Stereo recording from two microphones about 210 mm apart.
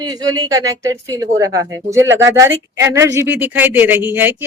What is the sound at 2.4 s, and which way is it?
Speech, 15° right (ahead or behind).